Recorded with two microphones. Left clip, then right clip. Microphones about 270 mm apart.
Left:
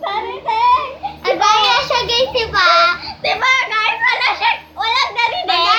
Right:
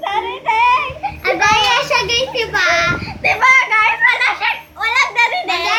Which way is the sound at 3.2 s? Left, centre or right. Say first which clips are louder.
Right 4 dB; right.